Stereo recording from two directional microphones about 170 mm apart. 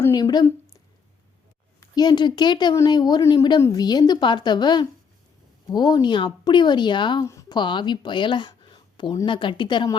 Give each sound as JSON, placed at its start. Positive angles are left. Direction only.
{"t": 0.0, "sound": "a woman's voice", "side_deg": 20}
{"t": 1.8, "sound": "a woman's voice", "side_deg": 25}